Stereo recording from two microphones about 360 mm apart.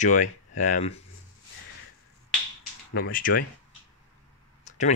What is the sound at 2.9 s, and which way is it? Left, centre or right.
Speech, left.